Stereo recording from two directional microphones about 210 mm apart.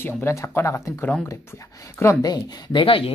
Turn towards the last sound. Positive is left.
turn(degrees=25)  # may be behind; listen again after turning